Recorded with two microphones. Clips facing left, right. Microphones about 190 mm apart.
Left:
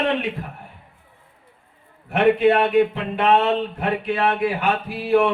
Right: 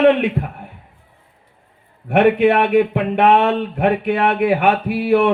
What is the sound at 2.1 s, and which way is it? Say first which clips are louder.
A man's voice: right 3 dB; 65° right (ahead or behind).